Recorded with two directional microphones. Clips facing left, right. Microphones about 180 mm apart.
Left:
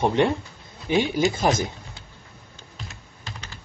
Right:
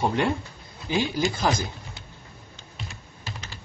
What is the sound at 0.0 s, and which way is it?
Speech, 20° left (ahead or behind).